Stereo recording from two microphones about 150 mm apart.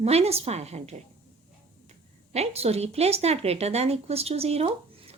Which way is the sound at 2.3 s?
45° right (ahead or behind).